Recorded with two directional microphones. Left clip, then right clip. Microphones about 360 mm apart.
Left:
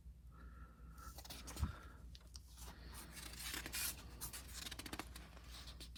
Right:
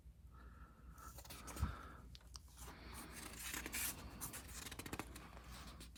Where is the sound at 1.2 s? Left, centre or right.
Centre.